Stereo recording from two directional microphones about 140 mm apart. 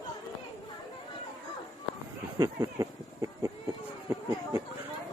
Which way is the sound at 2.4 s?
25° right (ahead or behind).